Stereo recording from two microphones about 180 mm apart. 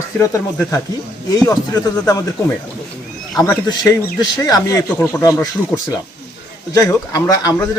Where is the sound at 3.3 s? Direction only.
20° left (ahead or behind).